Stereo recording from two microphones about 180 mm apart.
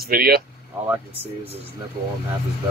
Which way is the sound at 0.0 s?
55° right (ahead or behind).